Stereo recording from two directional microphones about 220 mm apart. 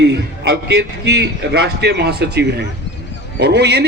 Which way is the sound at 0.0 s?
50° right (ahead or behind).